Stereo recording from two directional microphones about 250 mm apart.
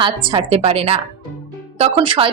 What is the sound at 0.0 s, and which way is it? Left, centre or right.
A woman's voice, centre.